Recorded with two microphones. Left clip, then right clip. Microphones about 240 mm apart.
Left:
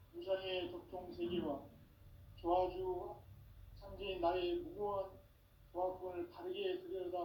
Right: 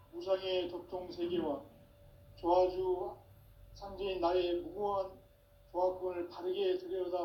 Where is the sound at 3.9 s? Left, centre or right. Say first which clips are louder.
Right 5 dB; right.